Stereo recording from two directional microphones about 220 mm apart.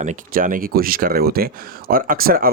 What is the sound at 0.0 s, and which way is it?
Speech, 35° right (ahead or behind).